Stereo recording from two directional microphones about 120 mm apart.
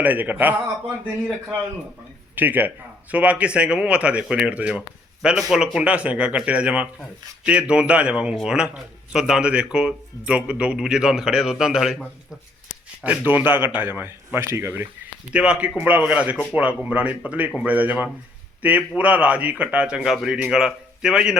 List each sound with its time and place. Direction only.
0.0 s speech: 15° right (ahead or behind)
2.3 s speech: 15° right (ahead or behind)
13.0 s speech: 15° right (ahead or behind)
15.3 s speech: 10° right (ahead or behind)